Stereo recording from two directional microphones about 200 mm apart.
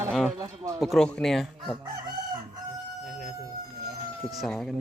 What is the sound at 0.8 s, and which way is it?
Speech, centre (ahead or behind).